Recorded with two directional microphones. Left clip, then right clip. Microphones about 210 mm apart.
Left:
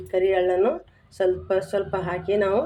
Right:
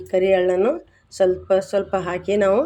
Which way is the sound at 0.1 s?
30° right (ahead or behind).